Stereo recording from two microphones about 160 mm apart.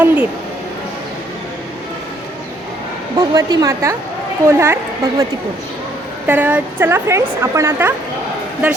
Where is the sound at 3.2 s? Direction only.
25° right (ahead or behind).